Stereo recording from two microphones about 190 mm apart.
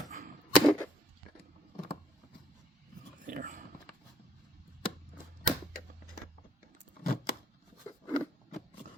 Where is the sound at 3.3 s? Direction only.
45° right (ahead or behind).